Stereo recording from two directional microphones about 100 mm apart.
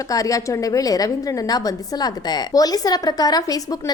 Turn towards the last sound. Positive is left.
turn(degrees=40)  # may be behind; listen again after turning